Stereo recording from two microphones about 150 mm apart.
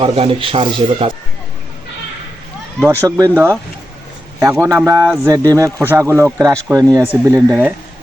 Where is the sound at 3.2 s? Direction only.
15° right (ahead or behind).